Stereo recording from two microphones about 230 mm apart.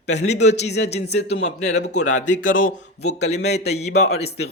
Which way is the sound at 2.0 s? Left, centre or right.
Left.